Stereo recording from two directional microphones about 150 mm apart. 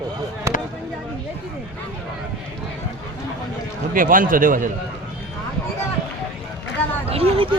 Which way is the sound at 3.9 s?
65° right (ahead or behind).